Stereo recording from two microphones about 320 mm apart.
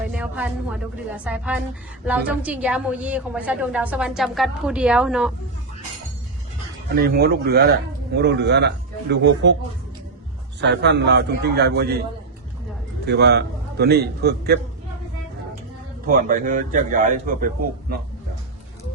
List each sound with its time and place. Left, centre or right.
0.0 s a woman's voice: centre
7.2 s a man's voice: right
10.6 s a man's voice: right
13.1 s a man's voice: right
16.0 s a man's voice: right